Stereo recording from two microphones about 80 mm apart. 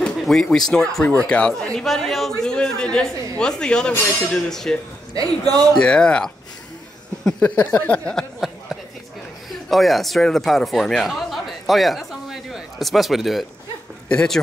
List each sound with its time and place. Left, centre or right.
0.0 s a man's voice: centre
5.1 s a man's voice: right
5.8 s a man's voice: centre
9.5 s speech: centre
14.0 s speech: centre